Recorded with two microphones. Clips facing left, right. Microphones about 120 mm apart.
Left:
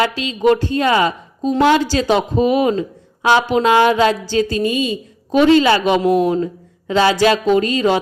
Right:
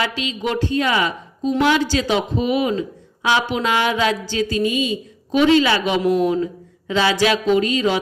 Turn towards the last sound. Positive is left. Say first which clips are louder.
# left 3 dB
turn(degrees=45)  # may be behind; listen again after turning